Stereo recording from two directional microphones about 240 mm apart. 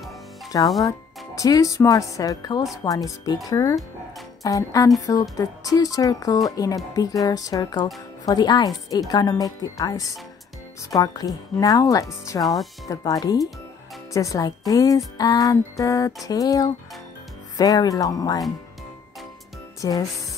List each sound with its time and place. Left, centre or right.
0.5 s speech: centre
19.8 s speech: centre